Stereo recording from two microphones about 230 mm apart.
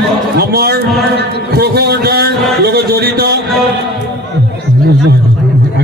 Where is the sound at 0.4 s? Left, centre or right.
Right.